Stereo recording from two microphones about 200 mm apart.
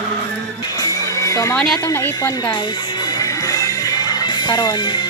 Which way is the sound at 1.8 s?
15° left (ahead or behind).